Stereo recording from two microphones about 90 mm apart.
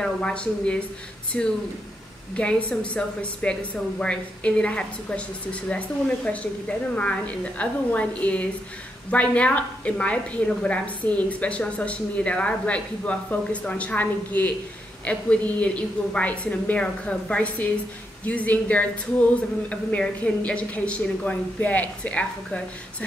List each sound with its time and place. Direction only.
0.0 s a woman's voice: 10° left (ahead or behind)